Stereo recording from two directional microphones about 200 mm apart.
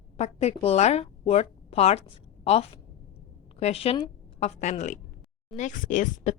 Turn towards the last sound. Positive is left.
turn(degrees=40)  # may be behind; listen again after turning